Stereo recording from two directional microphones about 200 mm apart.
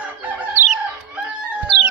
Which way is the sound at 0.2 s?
5° right (ahead or behind).